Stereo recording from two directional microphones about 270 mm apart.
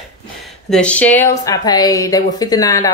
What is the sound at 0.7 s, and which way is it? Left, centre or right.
A woman's voice, centre.